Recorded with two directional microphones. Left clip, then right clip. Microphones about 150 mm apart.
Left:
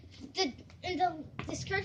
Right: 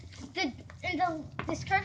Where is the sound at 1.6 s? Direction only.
35° left (ahead or behind).